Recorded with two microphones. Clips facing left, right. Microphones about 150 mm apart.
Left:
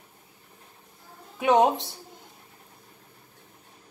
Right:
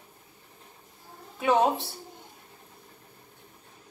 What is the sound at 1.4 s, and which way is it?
Speech, 15° left (ahead or behind).